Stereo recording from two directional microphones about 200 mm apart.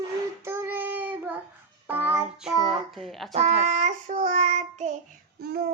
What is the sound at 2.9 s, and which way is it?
Speech, centre (ahead or behind).